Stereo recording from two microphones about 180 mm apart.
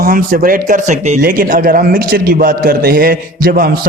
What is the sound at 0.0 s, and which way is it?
A man's voice, 50° right (ahead or behind).